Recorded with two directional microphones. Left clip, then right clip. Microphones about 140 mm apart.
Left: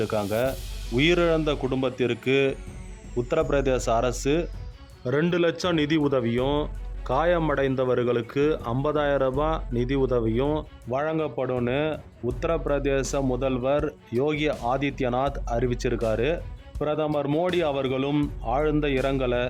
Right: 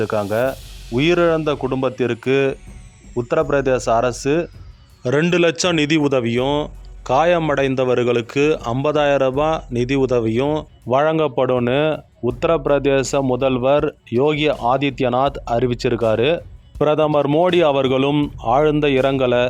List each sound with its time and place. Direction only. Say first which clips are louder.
0.0 s speech: right 6 dB; 25° right (ahead or behind)
5.3 s speech: right 8 dB; 35° right (ahead or behind)
10.8 s speech: right 11 dB; 45° right (ahead or behind); by 16.8 s 30° right (ahead or behind)
16.8 s speech: right 10 dB; 50° right (ahead or behind)
17.2 s speech: right 9 dB; 30° right (ahead or behind)
17.5 s speech: right 10 dB; 45° right (ahead or behind)